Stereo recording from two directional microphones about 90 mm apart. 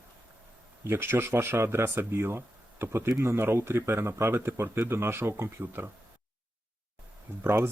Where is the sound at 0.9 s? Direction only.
25° right (ahead or behind).